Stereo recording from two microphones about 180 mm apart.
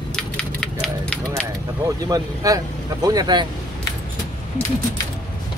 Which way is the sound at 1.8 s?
20° right (ahead or behind).